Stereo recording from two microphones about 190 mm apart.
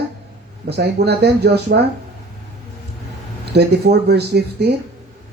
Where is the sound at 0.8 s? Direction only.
60° right (ahead or behind).